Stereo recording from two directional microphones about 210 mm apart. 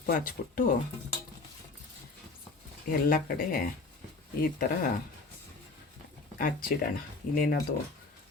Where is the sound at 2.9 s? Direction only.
45° left (ahead or behind).